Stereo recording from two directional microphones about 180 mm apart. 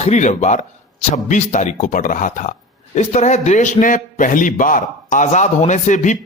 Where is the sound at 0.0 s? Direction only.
40° left (ahead or behind).